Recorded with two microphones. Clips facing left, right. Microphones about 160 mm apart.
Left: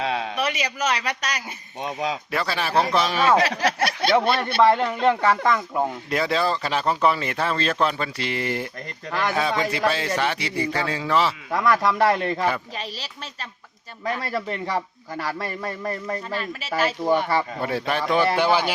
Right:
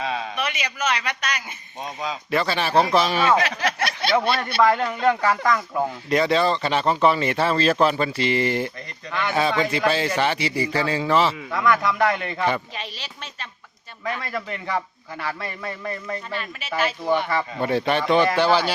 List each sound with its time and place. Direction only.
0.0 s a sound: 70° left (ahead or behind)
0.3 s speech: 35° left (ahead or behind)
1.8 s speech: 70° left (ahead or behind)
2.3 s speech: centre (ahead or behind)
3.2 s a man's voice: 35° left (ahead or behind)
4.6 s speech: 25° left (ahead or behind)
6.1 s speech: centre (ahead or behind)
9.0 s a man's voice: 40° left (ahead or behind)
9.3 s speech: centre (ahead or behind)
11.5 s a man's voice: 35° left (ahead or behind)
17.6 s speech: centre (ahead or behind)